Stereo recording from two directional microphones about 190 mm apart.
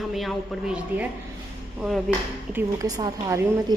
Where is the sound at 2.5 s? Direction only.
20° right (ahead or behind).